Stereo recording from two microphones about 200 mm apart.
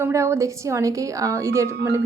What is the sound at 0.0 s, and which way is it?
A woman's voice, 15° right (ahead or behind).